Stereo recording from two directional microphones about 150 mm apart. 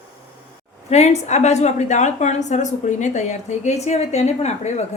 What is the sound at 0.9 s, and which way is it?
A woman's voice, 45° left (ahead or behind).